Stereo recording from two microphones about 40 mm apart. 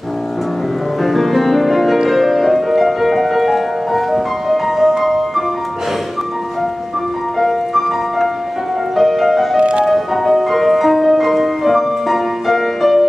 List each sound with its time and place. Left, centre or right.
1.0 s music: centre
7.3 s music: centre
9.6 s music: right
9.8 s music: centre